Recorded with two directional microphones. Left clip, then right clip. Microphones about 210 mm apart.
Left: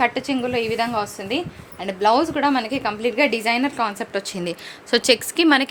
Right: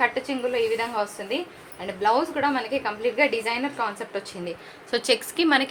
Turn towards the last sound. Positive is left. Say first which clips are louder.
# left 4 dB
turn(degrees=40)  # may be behind; listen again after turning